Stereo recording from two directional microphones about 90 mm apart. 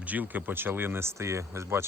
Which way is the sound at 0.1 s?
20° right (ahead or behind).